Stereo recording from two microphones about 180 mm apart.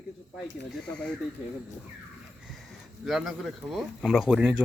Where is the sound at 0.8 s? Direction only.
5° left (ahead or behind).